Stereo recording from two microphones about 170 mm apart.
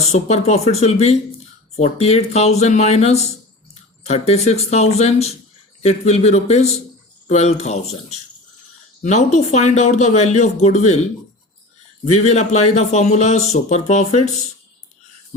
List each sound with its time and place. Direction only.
0.0 s speech: 40° left (ahead or behind)
12.1 s speech: 40° left (ahead or behind)